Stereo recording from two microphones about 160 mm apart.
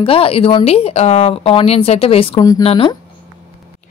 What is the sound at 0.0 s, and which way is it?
Speech, 35° left (ahead or behind).